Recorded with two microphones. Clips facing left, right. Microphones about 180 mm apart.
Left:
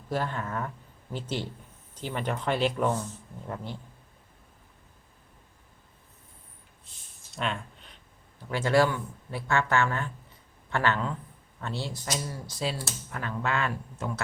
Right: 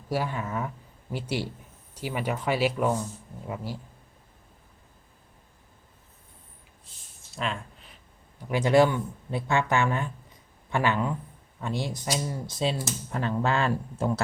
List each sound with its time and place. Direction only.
0.1 s speech: 10° right (ahead or behind)
7.3 s a sound: centre (ahead or behind)
8.4 s speech: 15° right (ahead or behind)